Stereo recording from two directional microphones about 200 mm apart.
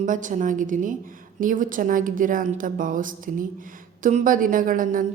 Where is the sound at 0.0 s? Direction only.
40° right (ahead or behind).